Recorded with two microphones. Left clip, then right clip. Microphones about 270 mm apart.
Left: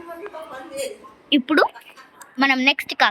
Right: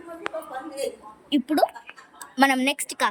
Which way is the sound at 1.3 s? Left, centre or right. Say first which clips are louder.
Left 4 dB; centre.